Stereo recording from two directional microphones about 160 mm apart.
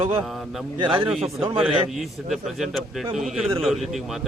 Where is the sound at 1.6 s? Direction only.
Centre (ahead or behind).